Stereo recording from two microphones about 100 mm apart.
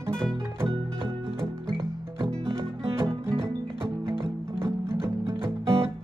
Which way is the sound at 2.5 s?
25° right (ahead or behind).